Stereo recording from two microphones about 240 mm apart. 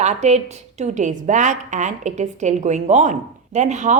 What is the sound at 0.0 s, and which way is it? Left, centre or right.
A woman's voice, right.